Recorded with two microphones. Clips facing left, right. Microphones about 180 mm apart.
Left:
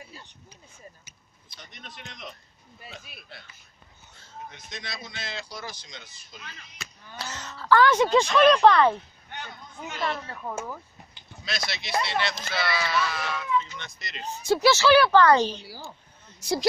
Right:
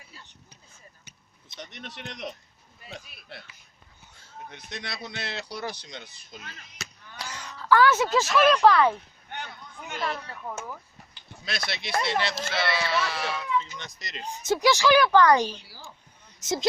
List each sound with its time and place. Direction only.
1.6 s speech: 70° right (ahead or behind)
4.5 s speech: 65° right (ahead or behind)
7.2 s a woman's voice: 10° right (ahead or behind)
11.4 s speech: 55° right (ahead or behind)
12.0 s speech: 40° right (ahead or behind)
14.2 s a woman's voice: 15° right (ahead or behind)
16.3 s a sound: 20° right (ahead or behind)